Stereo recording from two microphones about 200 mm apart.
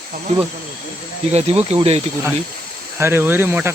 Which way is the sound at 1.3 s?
30° right (ahead or behind).